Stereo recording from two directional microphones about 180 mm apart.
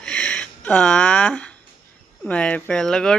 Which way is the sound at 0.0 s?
5° left (ahead or behind).